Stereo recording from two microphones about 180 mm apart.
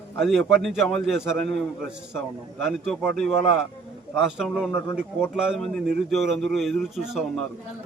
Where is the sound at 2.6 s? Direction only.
Centre (ahead or behind).